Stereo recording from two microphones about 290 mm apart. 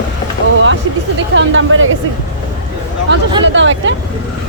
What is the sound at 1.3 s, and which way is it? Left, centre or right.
Speech, right.